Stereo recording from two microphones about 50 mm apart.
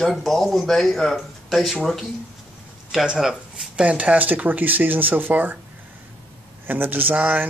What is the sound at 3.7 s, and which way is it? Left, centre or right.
Speech, right.